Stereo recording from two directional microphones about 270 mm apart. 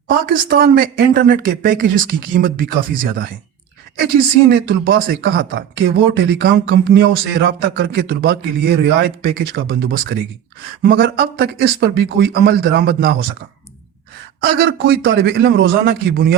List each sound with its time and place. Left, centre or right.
0.3 s speech: right
14.4 s speech: right